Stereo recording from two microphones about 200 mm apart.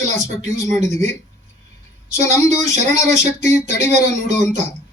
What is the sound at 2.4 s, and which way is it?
Speech, 35° right (ahead or behind).